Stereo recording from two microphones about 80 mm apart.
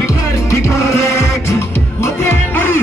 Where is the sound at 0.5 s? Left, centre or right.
Left.